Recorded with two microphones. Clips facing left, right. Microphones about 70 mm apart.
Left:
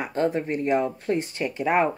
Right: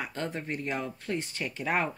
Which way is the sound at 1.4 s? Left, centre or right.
Centre.